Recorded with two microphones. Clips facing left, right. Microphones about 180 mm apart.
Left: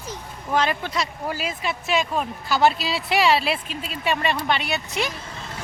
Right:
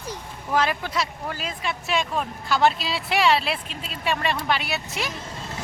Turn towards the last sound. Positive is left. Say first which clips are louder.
# left 3 dB
turn(degrees=0)  # may be behind; listen again after turning